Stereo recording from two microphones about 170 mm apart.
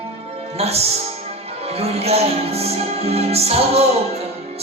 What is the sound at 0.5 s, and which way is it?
Music, 35° right (ahead or behind).